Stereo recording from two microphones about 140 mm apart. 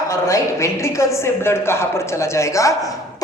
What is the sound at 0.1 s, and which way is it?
A woman's voice, 20° left (ahead or behind).